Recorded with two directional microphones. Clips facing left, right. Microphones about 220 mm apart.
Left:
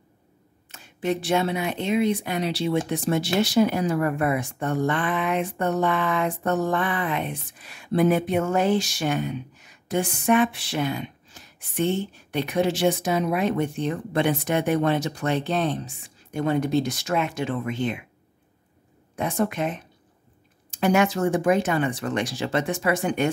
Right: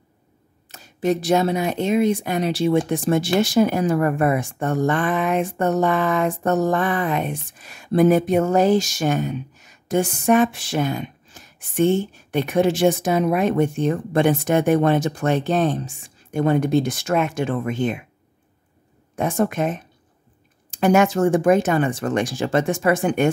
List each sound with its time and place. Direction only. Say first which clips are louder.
0.7 s speech: right 5 dB; 40° right (ahead or behind)
19.1 s speech: right 4 dB; 50° right (ahead or behind)